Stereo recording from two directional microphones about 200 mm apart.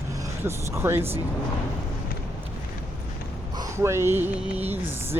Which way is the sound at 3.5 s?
15° right (ahead or behind).